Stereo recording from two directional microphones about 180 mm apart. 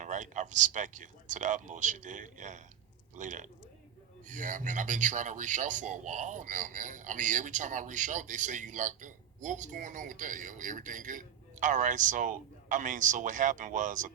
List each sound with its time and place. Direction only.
0.0 s speech: 45° right (ahead or behind)